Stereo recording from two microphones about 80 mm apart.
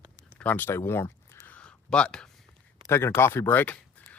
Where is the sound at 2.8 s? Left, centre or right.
Left.